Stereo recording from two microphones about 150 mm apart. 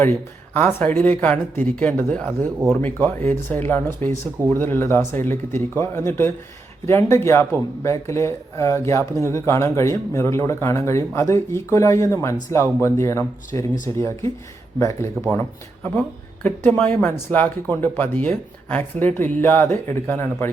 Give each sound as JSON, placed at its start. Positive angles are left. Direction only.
{"t": 0.0, "sound": "speech", "side_deg": 15}